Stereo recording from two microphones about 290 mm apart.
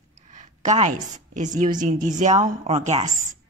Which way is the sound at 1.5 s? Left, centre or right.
Right.